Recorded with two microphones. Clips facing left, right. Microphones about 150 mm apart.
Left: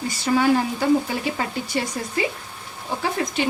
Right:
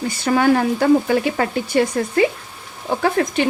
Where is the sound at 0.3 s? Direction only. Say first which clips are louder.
Right 4 dB; 60° right (ahead or behind).